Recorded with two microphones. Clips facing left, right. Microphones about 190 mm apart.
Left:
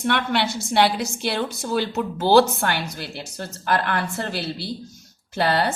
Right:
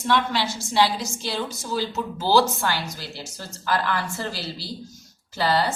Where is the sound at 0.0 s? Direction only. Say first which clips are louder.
Left 1 dB; 60° left (ahead or behind).